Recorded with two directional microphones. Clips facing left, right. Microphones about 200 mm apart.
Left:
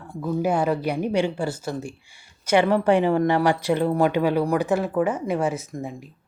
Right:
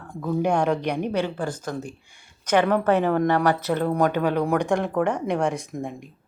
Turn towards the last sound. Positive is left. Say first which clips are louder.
# right 1 dB
turn(degrees=5)  # may be behind; listen again after turning